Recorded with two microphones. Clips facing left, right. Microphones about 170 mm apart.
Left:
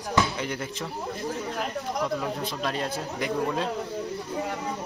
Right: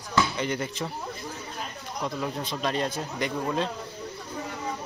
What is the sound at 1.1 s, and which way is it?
Speech, 70° left (ahead or behind).